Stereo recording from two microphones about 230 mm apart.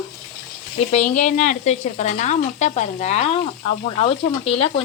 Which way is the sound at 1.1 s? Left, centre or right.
Left.